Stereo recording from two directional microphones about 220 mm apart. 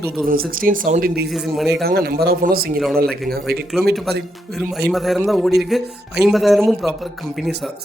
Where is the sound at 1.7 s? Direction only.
45° right (ahead or behind).